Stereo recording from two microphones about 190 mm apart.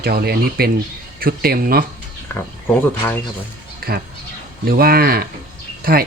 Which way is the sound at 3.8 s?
55° right (ahead or behind).